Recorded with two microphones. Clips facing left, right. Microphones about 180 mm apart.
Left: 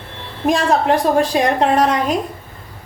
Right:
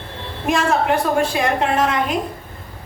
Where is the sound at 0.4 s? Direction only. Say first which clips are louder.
Left 3 dB; 35° left (ahead or behind).